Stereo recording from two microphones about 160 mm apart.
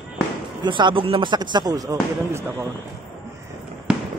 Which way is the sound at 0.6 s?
30° right (ahead or behind).